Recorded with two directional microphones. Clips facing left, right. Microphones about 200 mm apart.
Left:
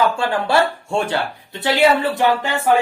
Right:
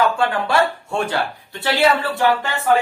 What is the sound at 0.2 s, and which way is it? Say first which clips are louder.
Speech: left 1 dB; 30° left (ahead or behind).